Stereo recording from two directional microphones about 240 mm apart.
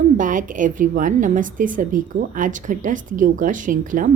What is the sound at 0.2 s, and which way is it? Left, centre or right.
A woman's voice, right.